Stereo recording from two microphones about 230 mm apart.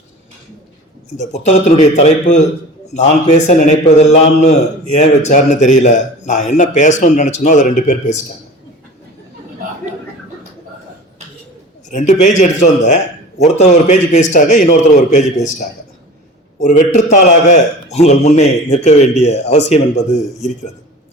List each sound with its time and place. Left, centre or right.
1.1 s a man's voice: left
11.9 s a man's voice: left
16.6 s a man's voice: left